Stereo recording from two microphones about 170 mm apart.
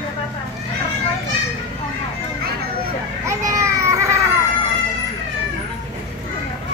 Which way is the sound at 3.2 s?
20° right (ahead or behind).